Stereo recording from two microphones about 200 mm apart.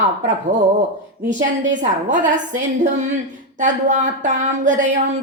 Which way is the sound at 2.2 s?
40° right (ahead or behind).